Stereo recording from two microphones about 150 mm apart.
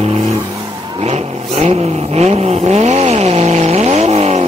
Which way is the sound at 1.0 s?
45° right (ahead or behind).